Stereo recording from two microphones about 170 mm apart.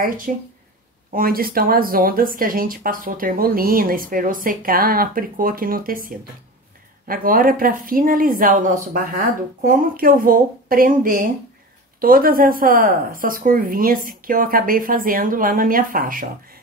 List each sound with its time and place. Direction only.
0.3 s speech: 55° right (ahead or behind)
7.1 s speech: 55° right (ahead or behind)